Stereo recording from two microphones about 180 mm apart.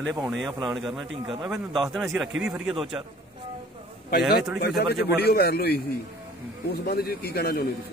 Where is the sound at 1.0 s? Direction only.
25° right (ahead or behind).